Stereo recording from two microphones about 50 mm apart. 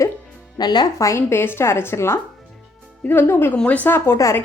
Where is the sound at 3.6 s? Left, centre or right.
Left.